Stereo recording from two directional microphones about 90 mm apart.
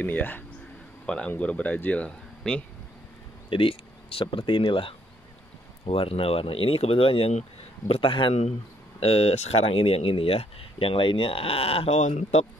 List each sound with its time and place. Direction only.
0.0 s speech: 20° left (ahead or behind)
3.4 s speech: 90° left
5.9 s speech: 90° left
7.9 s speech: 75° left (ahead or behind)
9.0 s speech: 90° left